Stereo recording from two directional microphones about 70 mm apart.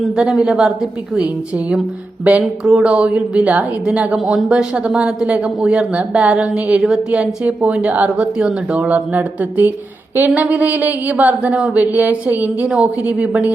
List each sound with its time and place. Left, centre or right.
0.2 s a woman's voice: centre
1.2 s a woman's voice: centre
12.6 s a woman's voice: centre